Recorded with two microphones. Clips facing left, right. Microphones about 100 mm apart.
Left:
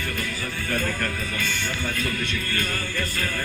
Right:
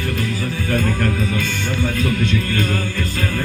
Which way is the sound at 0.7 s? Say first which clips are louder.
Right 7 dB; 55° right (ahead or behind).